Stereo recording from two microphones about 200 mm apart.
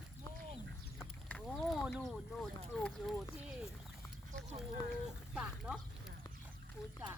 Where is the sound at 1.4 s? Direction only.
Centre (ahead or behind).